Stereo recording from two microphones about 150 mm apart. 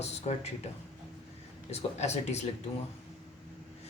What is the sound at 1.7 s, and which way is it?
Speech, 45° left (ahead or behind).